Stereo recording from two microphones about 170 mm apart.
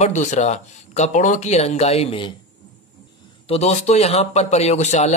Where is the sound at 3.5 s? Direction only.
40° left (ahead or behind).